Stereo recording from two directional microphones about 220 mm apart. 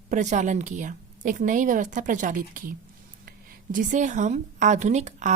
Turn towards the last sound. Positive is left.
turn(degrees=-35)  # may be behind; listen again after turning